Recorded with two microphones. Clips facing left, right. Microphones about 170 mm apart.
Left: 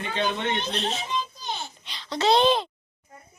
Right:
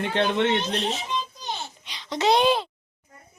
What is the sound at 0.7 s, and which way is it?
A child's voice, 10° right (ahead or behind).